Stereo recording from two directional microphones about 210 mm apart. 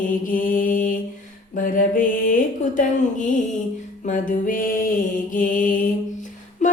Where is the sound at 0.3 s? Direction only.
40° left (ahead or behind).